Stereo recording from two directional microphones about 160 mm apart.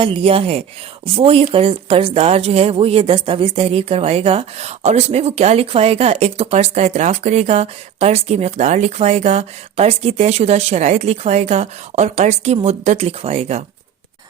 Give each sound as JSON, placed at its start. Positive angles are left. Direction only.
{"t": 0.0, "sound": "speech", "side_deg": -35}